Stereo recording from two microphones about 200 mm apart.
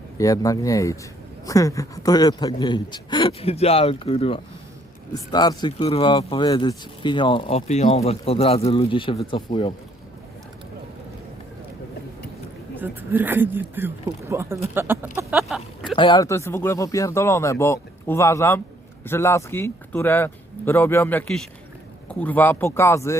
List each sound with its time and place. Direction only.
0.2 s speech: 15° left (ahead or behind)
12.8 s speech: 10° right (ahead or behind)
16.0 s speech: 20° left (ahead or behind)